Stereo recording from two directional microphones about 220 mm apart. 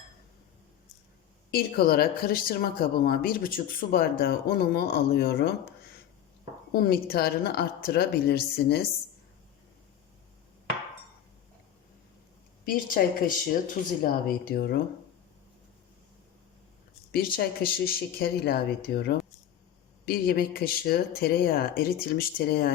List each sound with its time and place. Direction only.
1.5 s speech: 45° left (ahead or behind)
6.7 s speech: 40° left (ahead or behind)
12.6 s speech: 40° left (ahead or behind)
17.1 s speech: 40° left (ahead or behind)
20.1 s speech: 40° left (ahead or behind)